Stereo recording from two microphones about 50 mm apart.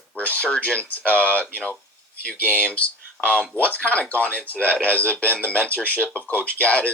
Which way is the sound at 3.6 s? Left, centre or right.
Left.